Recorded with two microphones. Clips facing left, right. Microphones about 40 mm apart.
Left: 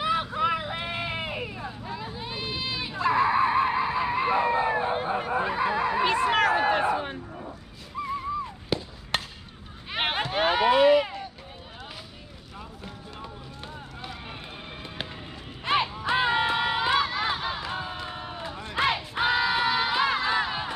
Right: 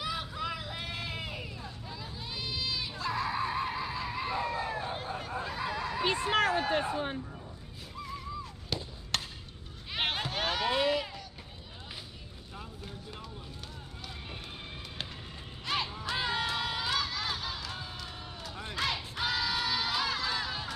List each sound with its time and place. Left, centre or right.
0.0 s hubbub: left
6.0 s a sound: left
8.7 s chop: centre
9.8 s a sound: left
15.6 s music: left
16.0 s crowd: left